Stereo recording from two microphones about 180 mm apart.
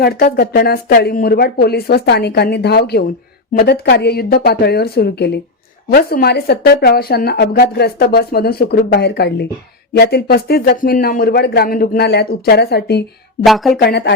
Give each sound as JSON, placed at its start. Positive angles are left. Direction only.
{"t": 0.0, "sound": "a woman's voice", "side_deg": 60}
{"t": 13.4, "sound": "speech", "side_deg": 0}
{"t": 13.7, "sound": "a woman's voice", "side_deg": 65}